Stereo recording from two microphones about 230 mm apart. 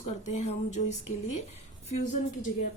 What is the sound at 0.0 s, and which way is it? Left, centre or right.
A woman's voice, left.